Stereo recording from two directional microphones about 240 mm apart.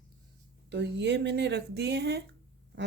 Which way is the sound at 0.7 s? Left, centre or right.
Right.